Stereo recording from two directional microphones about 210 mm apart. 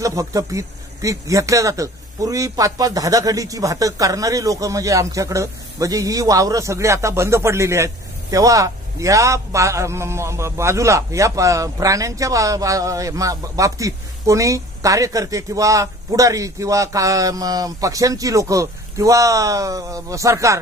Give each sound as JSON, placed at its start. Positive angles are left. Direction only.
{"t": 0.0, "sound": "speech", "side_deg": -15}